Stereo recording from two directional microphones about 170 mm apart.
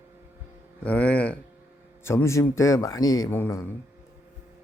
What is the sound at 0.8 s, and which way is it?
Speech, 10° left (ahead or behind).